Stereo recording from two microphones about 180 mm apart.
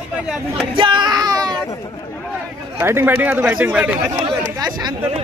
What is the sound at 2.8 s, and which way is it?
Speech, 10° right (ahead or behind).